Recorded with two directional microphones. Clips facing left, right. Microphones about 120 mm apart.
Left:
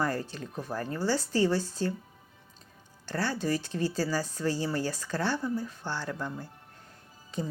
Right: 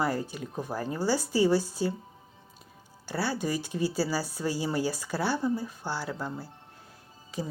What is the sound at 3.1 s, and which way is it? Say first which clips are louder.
Speech: even; 10° right (ahead or behind).